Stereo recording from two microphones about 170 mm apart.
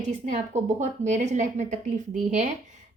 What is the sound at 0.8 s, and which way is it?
Speech, 45° right (ahead or behind).